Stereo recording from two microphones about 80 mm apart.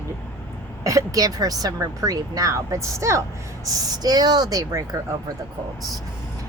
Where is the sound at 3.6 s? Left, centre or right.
Right.